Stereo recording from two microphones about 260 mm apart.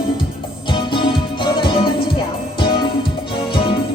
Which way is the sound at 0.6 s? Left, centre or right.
Centre.